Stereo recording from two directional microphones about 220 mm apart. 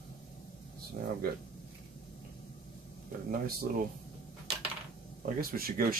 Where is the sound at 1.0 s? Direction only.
40° right (ahead or behind).